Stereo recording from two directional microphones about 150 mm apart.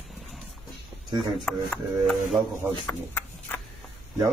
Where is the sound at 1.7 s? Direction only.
5° left (ahead or behind).